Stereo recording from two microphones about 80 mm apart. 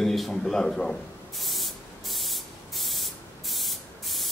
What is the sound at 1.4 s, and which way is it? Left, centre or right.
Spray, centre.